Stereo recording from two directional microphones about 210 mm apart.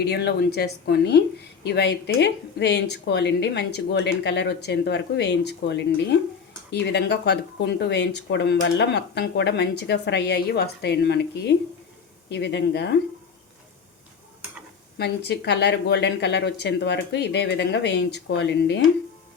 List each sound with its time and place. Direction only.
0.0 s a woman's voice: 50° left (ahead or behind)
14.9 s a woman's voice: 50° left (ahead or behind)